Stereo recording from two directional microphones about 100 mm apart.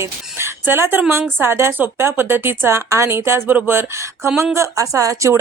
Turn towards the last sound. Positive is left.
turn(degrees=-30)  # may be behind; listen again after turning